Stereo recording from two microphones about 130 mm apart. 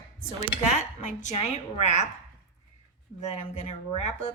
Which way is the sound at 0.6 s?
65° left (ahead or behind).